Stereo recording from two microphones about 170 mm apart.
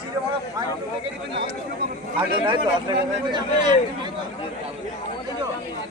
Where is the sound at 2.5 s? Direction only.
25° right (ahead or behind).